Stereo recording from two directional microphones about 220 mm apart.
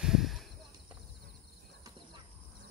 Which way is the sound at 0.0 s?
Centre (ahead or behind).